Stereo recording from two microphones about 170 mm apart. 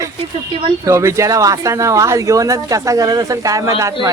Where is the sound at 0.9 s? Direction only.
15° right (ahead or behind).